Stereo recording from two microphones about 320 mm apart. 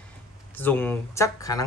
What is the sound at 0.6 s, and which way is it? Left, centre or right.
Speech, centre.